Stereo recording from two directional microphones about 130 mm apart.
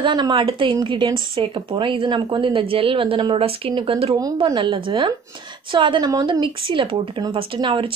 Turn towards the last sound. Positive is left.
turn(degrees=-40)  # may be behind; listen again after turning